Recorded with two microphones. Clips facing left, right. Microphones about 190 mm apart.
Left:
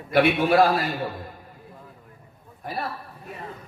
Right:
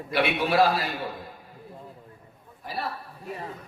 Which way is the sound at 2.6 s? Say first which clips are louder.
Left 3 dB; 50° left (ahead or behind).